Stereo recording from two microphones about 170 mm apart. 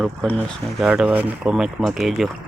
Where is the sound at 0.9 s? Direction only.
10° right (ahead or behind).